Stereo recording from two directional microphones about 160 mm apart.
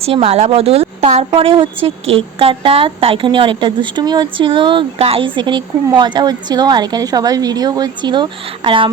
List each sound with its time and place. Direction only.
0.0 s a woman's voice: 40° right (ahead or behind)